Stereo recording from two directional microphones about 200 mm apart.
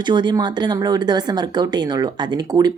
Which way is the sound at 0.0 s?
20° right (ahead or behind).